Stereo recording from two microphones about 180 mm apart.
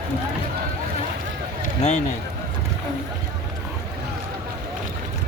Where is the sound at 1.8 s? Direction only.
40° left (ahead or behind).